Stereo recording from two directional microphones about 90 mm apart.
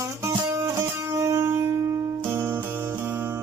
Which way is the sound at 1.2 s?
35° right (ahead or behind).